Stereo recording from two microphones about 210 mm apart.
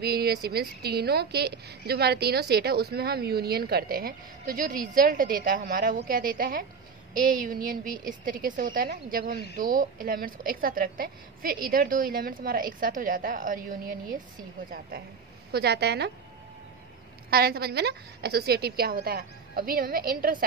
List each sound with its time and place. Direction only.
0.0 s a woman's voice: 50° right (ahead or behind)
15.5 s a woman's voice: 50° right (ahead or behind)
17.3 s a woman's voice: 45° right (ahead or behind)